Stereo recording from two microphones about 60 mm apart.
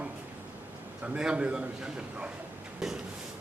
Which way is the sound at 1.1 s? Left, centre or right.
Centre.